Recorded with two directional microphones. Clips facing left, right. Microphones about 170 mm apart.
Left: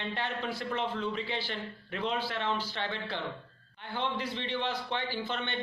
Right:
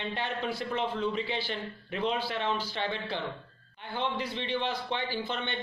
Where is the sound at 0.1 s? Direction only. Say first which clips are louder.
Right 2 dB; 15° right (ahead or behind).